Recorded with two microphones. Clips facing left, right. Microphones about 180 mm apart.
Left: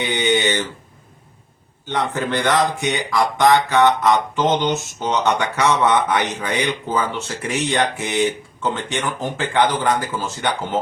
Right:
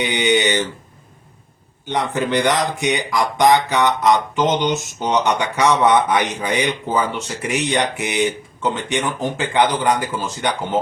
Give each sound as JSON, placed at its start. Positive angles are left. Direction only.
{"t": 0.0, "sound": "speech", "side_deg": -15}
{"t": 1.9, "sound": "speech", "side_deg": -15}